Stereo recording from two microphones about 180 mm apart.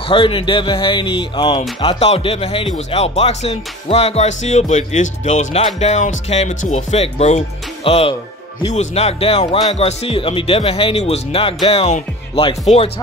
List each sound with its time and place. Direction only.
0.0 s speech: 30° left (ahead or behind)